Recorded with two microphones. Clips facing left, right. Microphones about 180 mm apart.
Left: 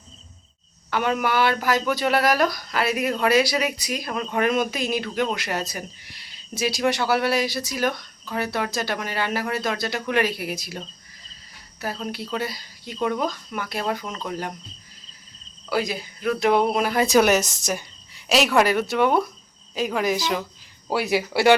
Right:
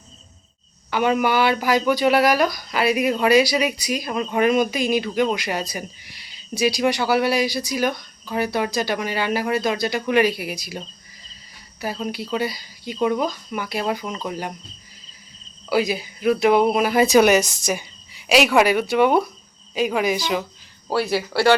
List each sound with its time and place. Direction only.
0.9 s speech: 5° right (ahead or behind)
15.7 s speech: 5° right (ahead or behind)
20.9 s speech: 15° left (ahead or behind)